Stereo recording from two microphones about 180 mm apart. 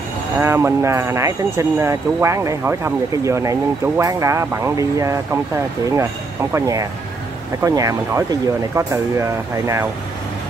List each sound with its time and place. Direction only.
0.4 s speech: 15° right (ahead or behind)
6.5 s speech: 20° right (ahead or behind)